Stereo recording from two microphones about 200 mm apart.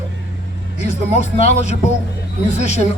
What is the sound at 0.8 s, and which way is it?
Speech, 35° left (ahead or behind).